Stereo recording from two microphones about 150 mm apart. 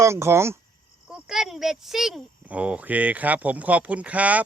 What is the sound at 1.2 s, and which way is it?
Speech, 5° right (ahead or behind).